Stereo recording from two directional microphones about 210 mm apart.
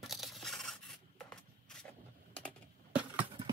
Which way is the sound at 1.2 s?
5° left (ahead or behind).